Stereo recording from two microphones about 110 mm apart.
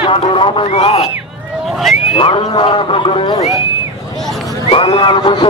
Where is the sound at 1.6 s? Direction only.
Centre (ahead or behind).